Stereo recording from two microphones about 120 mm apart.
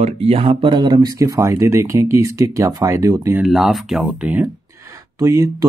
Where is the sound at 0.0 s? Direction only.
55° right (ahead or behind); by 3.3 s 25° right (ahead or behind).